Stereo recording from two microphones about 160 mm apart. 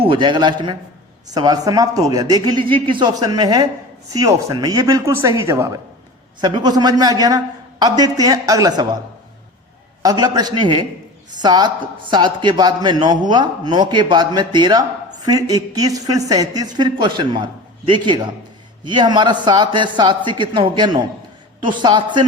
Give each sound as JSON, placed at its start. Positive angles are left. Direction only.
{"t": 0.0, "sound": "a man's voice", "side_deg": -30}
{"t": 10.0, "sound": "a man's voice", "side_deg": -25}